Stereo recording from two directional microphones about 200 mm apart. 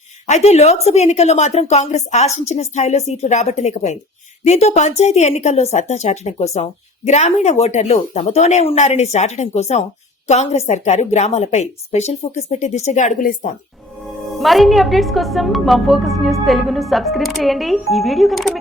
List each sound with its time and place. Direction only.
0.3 s a woman's voice: 35° left (ahead or behind)
14.3 s a woman's voice: centre (ahead or behind)